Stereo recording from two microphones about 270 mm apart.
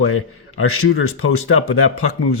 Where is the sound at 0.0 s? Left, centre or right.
Left.